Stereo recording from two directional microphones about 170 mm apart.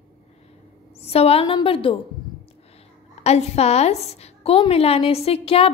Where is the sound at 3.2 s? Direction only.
40° left (ahead or behind).